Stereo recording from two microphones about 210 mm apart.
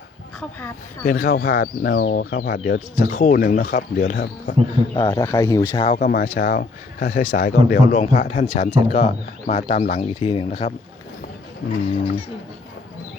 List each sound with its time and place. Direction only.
0.3 s speech: 10° left (ahead or behind)
1.0 s speech: 40° left (ahead or behind)
4.9 s speech: 20° left (ahead or behind)
5.7 s speech: 25° left (ahead or behind)
6.0 s speech: 40° left (ahead or behind)